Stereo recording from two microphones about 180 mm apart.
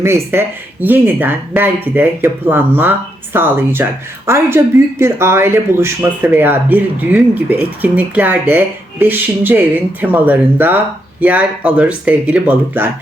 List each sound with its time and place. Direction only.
0.0 s speech: 15° right (ahead or behind)